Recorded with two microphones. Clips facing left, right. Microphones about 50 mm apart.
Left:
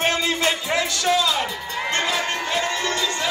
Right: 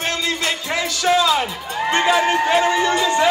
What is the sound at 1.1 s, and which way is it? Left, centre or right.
Speech, centre.